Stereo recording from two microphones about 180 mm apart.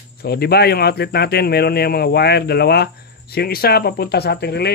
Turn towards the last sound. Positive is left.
turn(degrees=65)  # may be behind; listen again after turning